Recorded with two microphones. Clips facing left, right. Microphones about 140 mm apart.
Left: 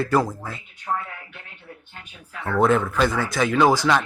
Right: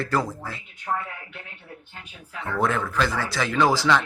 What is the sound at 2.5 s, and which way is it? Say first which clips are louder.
Speech: left 5 dB; 20° left (ahead or behind).